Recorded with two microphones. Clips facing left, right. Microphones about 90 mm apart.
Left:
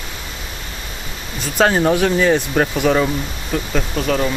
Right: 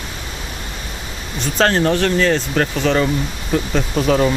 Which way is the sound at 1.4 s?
10° left (ahead or behind).